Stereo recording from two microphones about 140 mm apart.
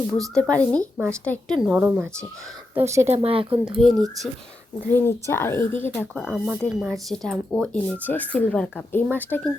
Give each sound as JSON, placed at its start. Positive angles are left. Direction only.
{"t": 0.1, "sound": "speech", "side_deg": 5}
{"t": 3.2, "sound": "speech", "side_deg": -40}
{"t": 3.8, "sound": "speech", "side_deg": 0}
{"t": 4.9, "sound": "speech", "side_deg": 15}
{"t": 6.1, "sound": "speech", "side_deg": 0}